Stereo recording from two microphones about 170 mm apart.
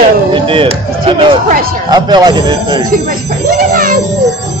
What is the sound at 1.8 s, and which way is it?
Speech, 25° right (ahead or behind).